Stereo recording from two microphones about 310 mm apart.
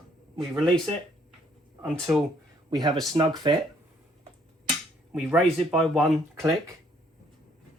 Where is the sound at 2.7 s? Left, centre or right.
Centre.